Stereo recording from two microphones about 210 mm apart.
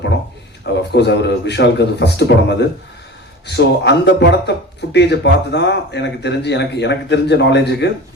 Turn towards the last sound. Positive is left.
turn(degrees=55)  # may be behind; listen again after turning